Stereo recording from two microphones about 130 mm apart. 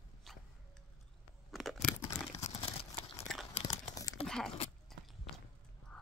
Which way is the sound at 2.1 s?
55° left (ahead or behind).